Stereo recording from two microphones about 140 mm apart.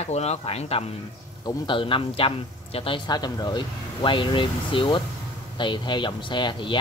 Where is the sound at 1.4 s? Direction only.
30° left (ahead or behind).